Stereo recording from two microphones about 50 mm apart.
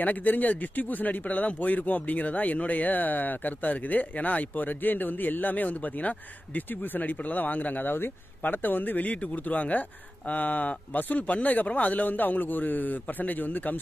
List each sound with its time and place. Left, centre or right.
0.0 s speech: left